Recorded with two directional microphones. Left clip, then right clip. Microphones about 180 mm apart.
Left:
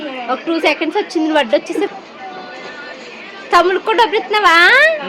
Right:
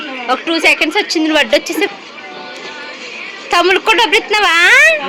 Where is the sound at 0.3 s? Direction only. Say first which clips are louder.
Right 4 dB; centre (ahead or behind).